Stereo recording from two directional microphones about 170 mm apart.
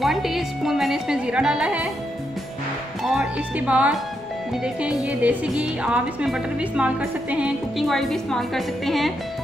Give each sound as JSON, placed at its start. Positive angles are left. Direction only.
{"t": 0.0, "sound": "music", "side_deg": 0}
{"t": 3.0, "sound": "speech", "side_deg": -5}